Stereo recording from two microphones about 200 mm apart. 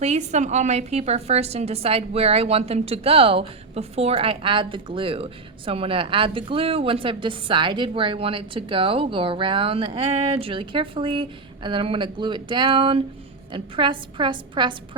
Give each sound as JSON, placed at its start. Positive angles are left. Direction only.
{"t": 0.0, "sound": "a woman's voice", "side_deg": -35}